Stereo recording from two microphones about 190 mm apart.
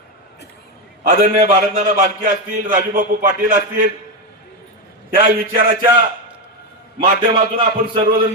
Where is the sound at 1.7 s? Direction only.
45° right (ahead or behind).